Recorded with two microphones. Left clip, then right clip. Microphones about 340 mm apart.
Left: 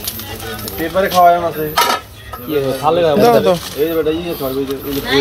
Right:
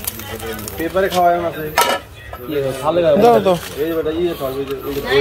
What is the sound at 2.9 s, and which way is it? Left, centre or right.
Speech, left.